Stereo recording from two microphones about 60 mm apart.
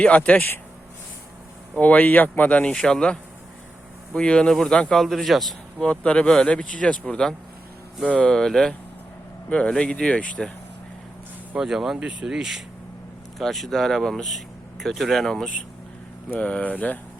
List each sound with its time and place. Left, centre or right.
0.0 s speech: left
1.8 s speech: left
2.7 s speech: centre
5.8 s speech: left
8.2 s speech: centre
11.5 s speech: centre
13.4 s speech: centre
16.4 s speech: left